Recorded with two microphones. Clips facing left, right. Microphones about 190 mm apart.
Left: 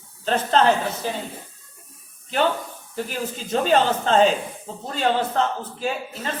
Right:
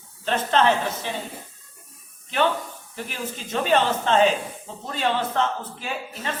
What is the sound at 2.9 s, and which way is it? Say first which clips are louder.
Speech: left 5 dB; 35° left (ahead or behind).